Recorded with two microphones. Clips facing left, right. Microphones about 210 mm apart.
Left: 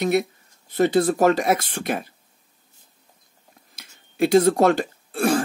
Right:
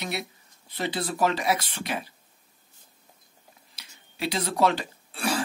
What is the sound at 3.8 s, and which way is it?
Throat clearing, 50° left (ahead or behind).